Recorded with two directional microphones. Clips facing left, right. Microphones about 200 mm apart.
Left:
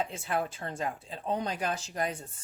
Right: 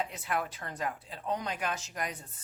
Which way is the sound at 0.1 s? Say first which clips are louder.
Left 2 dB; 25° left (ahead or behind).